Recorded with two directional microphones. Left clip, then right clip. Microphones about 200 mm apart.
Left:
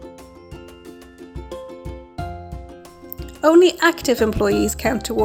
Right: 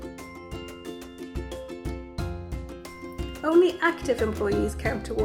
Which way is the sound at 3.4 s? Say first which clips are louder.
Left 8 dB; 40° left (ahead or behind).